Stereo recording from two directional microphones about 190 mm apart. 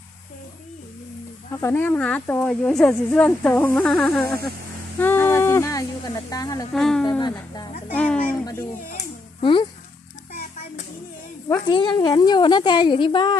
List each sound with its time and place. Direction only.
1.6 s speech: 10° left (ahead or behind)
4.9 s a sound: 10° left (ahead or behind)
6.3 s a woman's voice: 20° left (ahead or behind)
6.7 s speech: centre (ahead or behind)
7.1 s a woman's voice: 20° left (ahead or behind)
7.9 s speech: 5° left (ahead or behind)
9.4 s speech: 25° left (ahead or behind)
11.4 s a woman's voice: 20° left (ahead or behind)